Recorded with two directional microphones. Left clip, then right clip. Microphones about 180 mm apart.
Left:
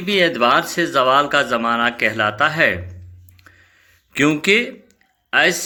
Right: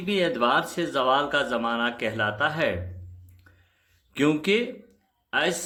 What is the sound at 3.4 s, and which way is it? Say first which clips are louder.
Music: left 11 dB; 10° left (ahead or behind).